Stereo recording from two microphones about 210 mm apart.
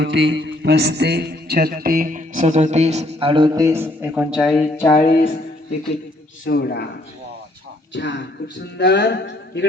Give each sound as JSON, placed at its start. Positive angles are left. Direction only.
{"t": 0.0, "sound": "a man's voice", "side_deg": -55}
{"t": 4.9, "sound": "music", "side_deg": 35}
{"t": 6.4, "sound": "a man's voice", "side_deg": 50}
{"t": 7.9, "sound": "speech", "side_deg": 55}